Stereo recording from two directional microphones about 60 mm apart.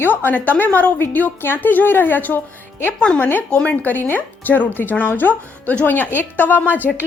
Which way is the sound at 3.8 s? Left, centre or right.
Left.